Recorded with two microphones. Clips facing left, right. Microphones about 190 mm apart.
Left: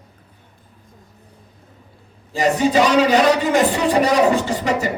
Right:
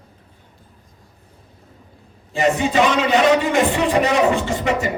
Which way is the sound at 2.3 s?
40° left (ahead or behind).